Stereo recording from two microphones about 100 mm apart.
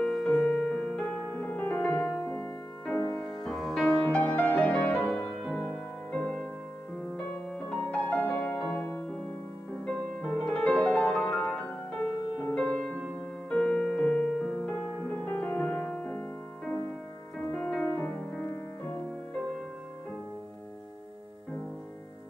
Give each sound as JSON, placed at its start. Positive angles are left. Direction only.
{"t": 0.0, "sound": "music", "side_deg": 5}
{"t": 0.3, "sound": "music", "side_deg": 20}
{"t": 2.9, "sound": "music", "side_deg": 35}
{"t": 3.4, "sound": "music", "side_deg": 0}
{"t": 4.1, "sound": "music", "side_deg": 15}
{"t": 7.5, "sound": "music", "side_deg": 10}
{"t": 9.8, "sound": "music", "side_deg": 10}
{"t": 17.6, "sound": "music", "side_deg": 5}
{"t": 17.8, "sound": "music", "side_deg": 20}